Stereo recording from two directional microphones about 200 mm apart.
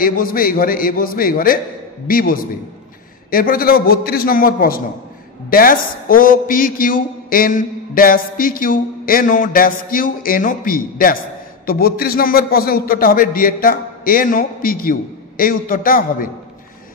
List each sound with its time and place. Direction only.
0.0 s a man's voice: 45° left (ahead or behind)